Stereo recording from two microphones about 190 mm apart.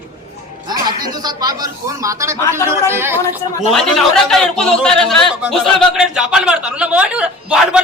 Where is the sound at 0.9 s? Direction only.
20° right (ahead or behind).